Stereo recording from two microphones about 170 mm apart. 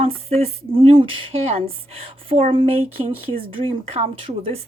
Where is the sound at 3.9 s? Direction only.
35° right (ahead or behind).